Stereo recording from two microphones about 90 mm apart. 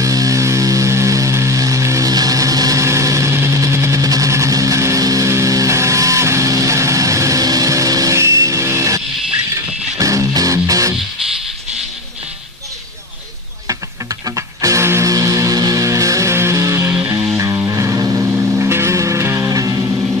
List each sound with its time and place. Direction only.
0.0 s music: 40° right (ahead or behind)
13.7 s music: 40° right (ahead or behind)
18.2 s music: 20° right (ahead or behind); by 19.9 s 40° right (ahead or behind)